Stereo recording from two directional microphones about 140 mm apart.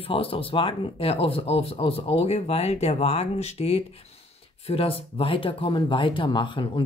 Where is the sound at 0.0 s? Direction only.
40° left (ahead or behind).